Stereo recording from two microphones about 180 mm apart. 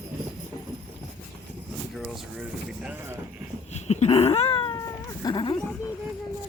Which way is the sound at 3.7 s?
40° left (ahead or behind).